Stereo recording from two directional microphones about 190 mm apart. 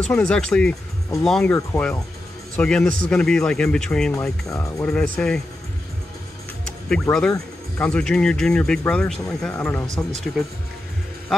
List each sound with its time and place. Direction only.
0.1 s speech: 5° left (ahead or behind)
4.5 s speech: 15° left (ahead or behind)
6.9 s speech: 5° left (ahead or behind)